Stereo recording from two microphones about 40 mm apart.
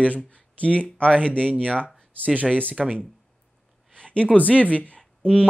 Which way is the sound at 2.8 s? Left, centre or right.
Centre.